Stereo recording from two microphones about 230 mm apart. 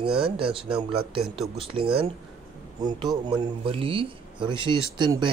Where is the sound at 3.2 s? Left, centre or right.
Centre.